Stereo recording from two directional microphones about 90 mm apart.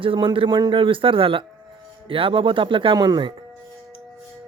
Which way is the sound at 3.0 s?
45° right (ahead or behind).